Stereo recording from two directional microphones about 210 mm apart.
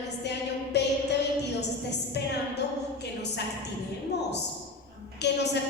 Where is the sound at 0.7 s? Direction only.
55° left (ahead or behind).